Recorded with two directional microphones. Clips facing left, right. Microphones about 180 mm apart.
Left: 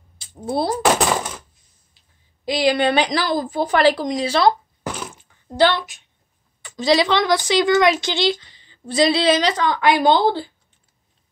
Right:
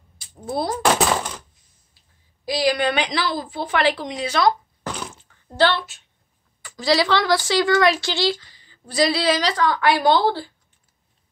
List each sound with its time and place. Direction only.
0.5 s a woman's voice: 30° left (ahead or behind)
2.4 s a woman's voice: 25° left (ahead or behind)
4.8 s a sound: 10° left (ahead or behind)
6.6 s a woman's voice: 20° left (ahead or behind)